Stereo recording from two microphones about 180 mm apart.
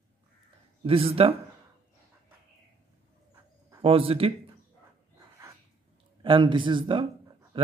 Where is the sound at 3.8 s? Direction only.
30° right (ahead or behind).